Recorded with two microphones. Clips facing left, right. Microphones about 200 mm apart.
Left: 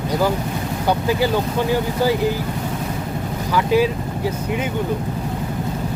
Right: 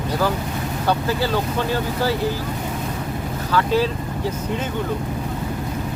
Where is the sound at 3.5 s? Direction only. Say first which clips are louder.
Left 2 dB; 15° left (ahead or behind).